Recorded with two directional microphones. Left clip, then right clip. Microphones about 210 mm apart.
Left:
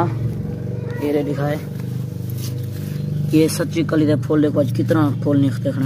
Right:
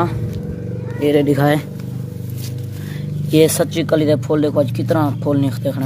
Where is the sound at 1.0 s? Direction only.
50° right (ahead or behind).